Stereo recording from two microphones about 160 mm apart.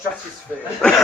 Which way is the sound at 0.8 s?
5° left (ahead or behind).